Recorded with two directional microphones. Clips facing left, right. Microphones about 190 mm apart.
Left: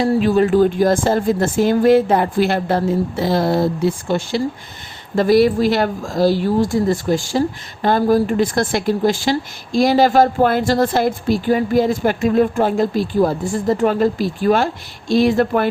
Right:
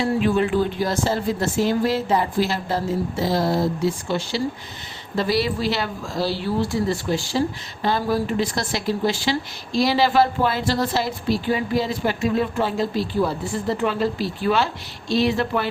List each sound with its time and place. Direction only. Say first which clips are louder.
0.0 s speech: left 5 dB; 40° left (ahead or behind)